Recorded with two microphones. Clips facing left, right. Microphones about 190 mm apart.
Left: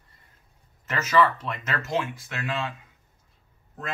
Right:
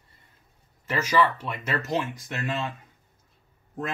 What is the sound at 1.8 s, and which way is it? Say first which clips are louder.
Speech: even; 40° right (ahead or behind).